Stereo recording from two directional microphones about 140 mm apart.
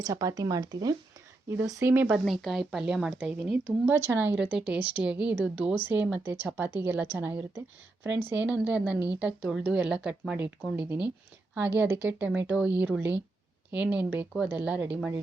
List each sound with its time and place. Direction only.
0.0 s speech: 25° right (ahead or behind)
1.6 s speech: 15° right (ahead or behind)
3.9 s speech: 20° right (ahead or behind)